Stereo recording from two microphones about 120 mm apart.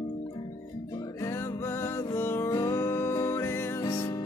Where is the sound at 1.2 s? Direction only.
20° left (ahead or behind).